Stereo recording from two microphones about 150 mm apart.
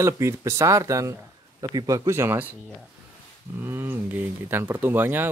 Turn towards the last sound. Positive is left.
turn(degrees=-15)  # may be behind; listen again after turning